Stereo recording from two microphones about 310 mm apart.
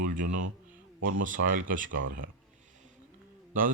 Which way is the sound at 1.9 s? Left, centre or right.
Right.